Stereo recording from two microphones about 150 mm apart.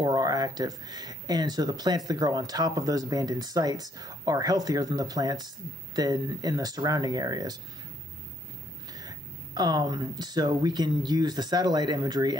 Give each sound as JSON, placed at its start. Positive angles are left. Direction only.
{"t": 0.0, "sound": "speech", "side_deg": -25}
{"t": 8.9, "sound": "speech", "side_deg": -25}